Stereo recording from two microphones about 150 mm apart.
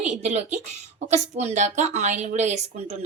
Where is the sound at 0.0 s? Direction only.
50° right (ahead or behind).